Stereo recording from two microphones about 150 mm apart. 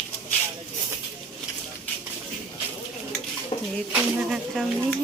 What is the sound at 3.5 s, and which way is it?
Dishes, 30° left (ahead or behind).